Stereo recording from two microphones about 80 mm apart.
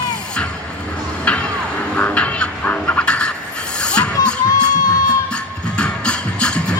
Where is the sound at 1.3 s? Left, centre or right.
Centre.